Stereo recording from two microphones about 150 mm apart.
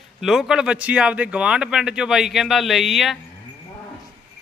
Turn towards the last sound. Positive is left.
turn(degrees=0)  # may be behind; listen again after turning